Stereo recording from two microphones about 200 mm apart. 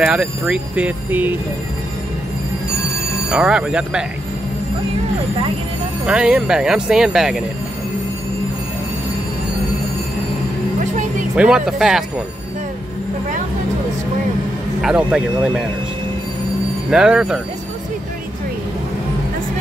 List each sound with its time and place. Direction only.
0.0 s speech: 5° right (ahead or behind)
3.3 s speech: 5° right (ahead or behind)
6.0 s speech: 5° right (ahead or behind)
10.8 s music: 40° right (ahead or behind)
11.3 s speech: 5° right (ahead or behind)
14.8 s speech: 5° right (ahead or behind)
16.9 s speech: 5° right (ahead or behind)